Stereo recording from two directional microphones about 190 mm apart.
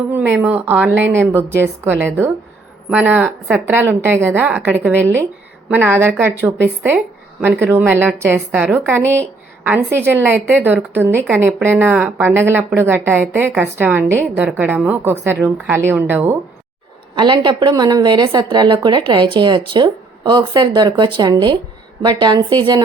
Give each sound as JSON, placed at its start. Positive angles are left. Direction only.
{"t": 0.1, "sound": "speech", "side_deg": -10}
{"t": 7.6, "sound": "speech", "side_deg": -10}
{"t": 17.2, "sound": "a woman's voice", "side_deg": -25}